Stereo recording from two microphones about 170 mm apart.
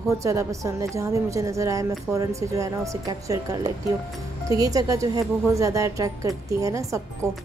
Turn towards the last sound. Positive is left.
turn(degrees=-20)  # may be behind; listen again after turning